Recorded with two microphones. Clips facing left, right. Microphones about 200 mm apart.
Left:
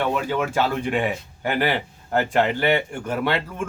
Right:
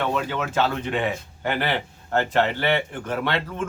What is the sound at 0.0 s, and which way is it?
Speech, 10° left (ahead or behind).